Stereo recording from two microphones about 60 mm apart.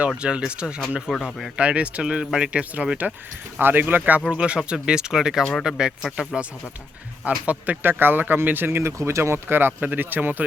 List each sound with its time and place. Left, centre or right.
0.2 s speech: centre
3.6 s speech: right
4.3 s speech: centre
7.3 s speech: right